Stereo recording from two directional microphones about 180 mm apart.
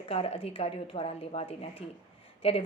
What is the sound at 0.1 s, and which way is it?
Speech, 35° left (ahead or behind).